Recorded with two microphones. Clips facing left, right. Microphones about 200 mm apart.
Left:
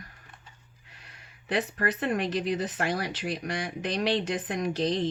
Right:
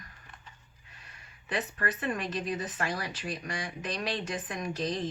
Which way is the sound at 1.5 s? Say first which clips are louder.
Left 5 dB; 70° left (ahead or behind).